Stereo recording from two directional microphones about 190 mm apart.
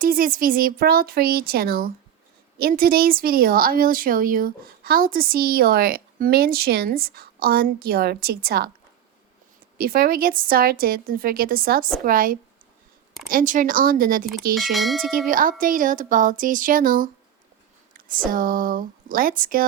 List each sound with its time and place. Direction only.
0.0 s speech: 45° right (ahead or behind)
9.7 s speech: 50° right (ahead or behind)
14.5 s speech: centre (ahead or behind)
15.3 s speech: 45° right (ahead or behind)